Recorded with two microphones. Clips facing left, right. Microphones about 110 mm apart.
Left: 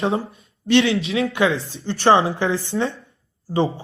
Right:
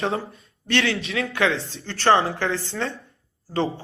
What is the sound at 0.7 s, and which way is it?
Speech, 20° left (ahead or behind).